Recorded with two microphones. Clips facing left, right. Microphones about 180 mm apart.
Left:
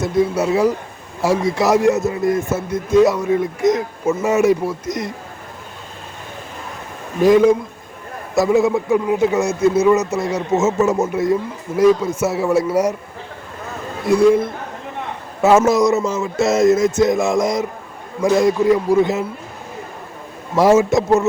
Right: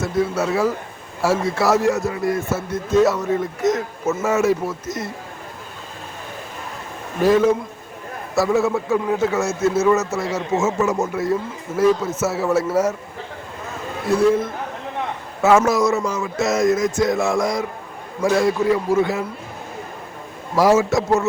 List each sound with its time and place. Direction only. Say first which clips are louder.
0.0 s a man's voice: left 3 dB; 15° left (ahead or behind)
7.2 s a man's voice: left 4 dB; 15° left (ahead or behind)
14.1 s a man's voice: left 4 dB; 15° left (ahead or behind)
15.4 s a man's voice: left 3 dB; 25° left (ahead or behind)
20.6 s a man's voice: left 3 dB; 20° left (ahead or behind)